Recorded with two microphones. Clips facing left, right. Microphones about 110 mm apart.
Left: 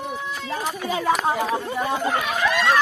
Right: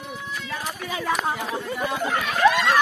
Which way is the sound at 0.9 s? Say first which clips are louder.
Left 4 dB; 30° left (ahead or behind).